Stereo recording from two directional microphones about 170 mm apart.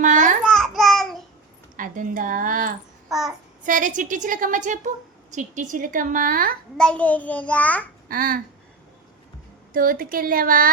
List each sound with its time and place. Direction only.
0.0 s babbling: 50° right (ahead or behind)
0.4 s babbling: 5° left (ahead or behind)
1.7 s a woman's voice: 50° right (ahead or behind)
3.1 s child singing: centre (ahead or behind)
3.6 s a woman's voice: 50° right (ahead or behind)
6.7 s a child's voice: 5° left (ahead or behind)
8.0 s babbling: 60° right (ahead or behind)
9.7 s speech: 55° right (ahead or behind)